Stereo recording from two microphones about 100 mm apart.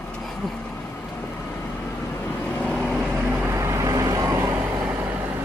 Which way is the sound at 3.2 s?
20° right (ahead or behind).